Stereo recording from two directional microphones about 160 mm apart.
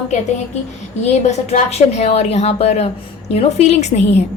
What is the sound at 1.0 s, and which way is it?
A woman's voice, 45° left (ahead or behind).